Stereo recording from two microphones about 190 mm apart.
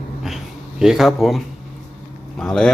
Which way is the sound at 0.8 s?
Centre (ahead or behind).